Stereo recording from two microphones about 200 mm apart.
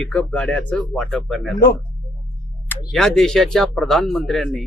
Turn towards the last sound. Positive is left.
turn(degrees=0)  # may be behind; listen again after turning